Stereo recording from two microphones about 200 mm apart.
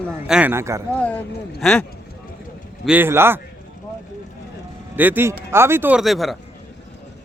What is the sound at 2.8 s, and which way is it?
Speech, 10° right (ahead or behind).